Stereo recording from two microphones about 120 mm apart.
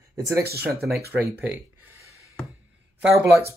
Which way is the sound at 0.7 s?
Centre (ahead or behind).